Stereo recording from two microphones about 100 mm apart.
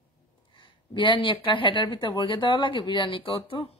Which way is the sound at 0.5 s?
55° left (ahead or behind).